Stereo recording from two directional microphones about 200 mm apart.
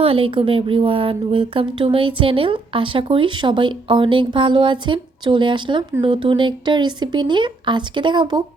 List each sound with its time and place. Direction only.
0.0 s a woman's voice: 25° right (ahead or behind)